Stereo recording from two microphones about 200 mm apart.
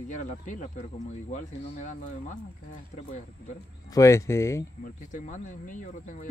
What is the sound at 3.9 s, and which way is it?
Speech, 15° left (ahead or behind).